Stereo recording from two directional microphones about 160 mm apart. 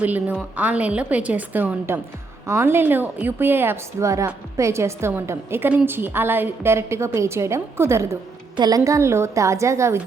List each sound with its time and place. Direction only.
0.0 s a woman's voice: 10° right (ahead or behind)